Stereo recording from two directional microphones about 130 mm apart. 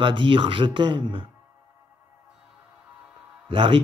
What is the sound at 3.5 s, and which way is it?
Speech, 40° right (ahead or behind).